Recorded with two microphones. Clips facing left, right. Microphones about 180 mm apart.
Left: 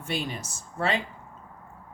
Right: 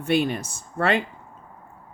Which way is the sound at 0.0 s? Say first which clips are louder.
Right 10 dB; 60° right (ahead or behind).